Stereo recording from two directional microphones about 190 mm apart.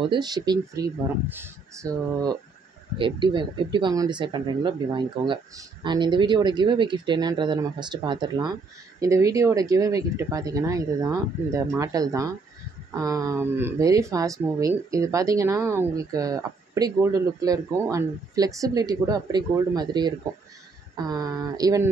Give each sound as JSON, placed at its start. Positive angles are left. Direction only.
{"t": 0.0, "sound": "speech", "side_deg": -25}
{"t": 3.0, "sound": "speech", "side_deg": -25}